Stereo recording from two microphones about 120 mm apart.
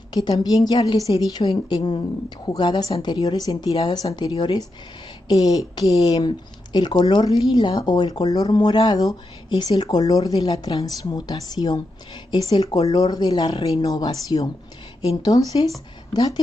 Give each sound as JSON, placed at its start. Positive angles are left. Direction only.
{"t": 0.4, "sound": "speech", "side_deg": 35}
{"t": 3.7, "sound": "speech", "side_deg": 45}